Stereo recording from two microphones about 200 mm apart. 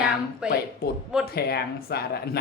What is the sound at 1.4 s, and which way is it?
Speech, 50° left (ahead or behind).